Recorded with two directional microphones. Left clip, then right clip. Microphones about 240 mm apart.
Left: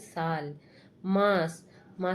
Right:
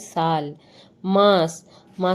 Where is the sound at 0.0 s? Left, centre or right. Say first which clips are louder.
Right 10 dB; right.